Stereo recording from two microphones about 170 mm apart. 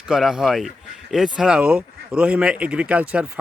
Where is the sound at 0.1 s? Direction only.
5° right (ahead or behind).